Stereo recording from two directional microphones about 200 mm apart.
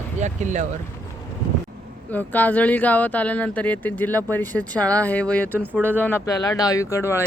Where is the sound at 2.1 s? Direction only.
10° left (ahead or behind).